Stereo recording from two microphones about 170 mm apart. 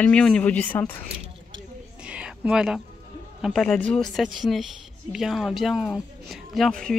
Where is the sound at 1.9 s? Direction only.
5° right (ahead or behind).